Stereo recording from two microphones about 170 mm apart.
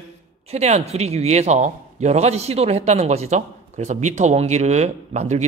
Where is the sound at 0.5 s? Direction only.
40° right (ahead or behind).